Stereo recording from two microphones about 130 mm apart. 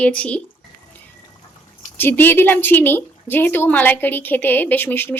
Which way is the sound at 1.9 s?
15° left (ahead or behind).